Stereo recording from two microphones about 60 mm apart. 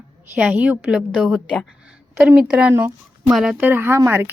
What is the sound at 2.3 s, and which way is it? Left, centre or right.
Speech, centre.